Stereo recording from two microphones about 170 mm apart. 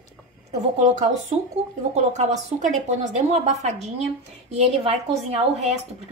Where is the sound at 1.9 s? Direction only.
45° right (ahead or behind).